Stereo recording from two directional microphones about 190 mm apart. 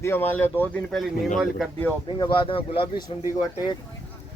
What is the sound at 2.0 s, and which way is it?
Speech, 25° left (ahead or behind).